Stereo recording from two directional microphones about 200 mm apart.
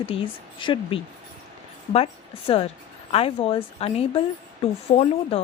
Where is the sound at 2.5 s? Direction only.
30° left (ahead or behind).